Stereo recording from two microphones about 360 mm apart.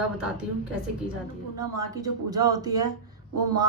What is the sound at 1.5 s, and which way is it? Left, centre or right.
A woman's voice, centre.